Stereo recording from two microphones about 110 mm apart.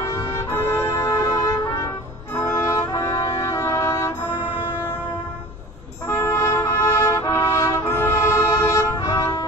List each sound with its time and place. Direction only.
0.0 s music: 25° left (ahead or behind)
2.9 s brass instrument: 35° left (ahead or behind)
3.3 s a sound: 25° left (ahead or behind)
6.0 s music: 25° left (ahead or behind)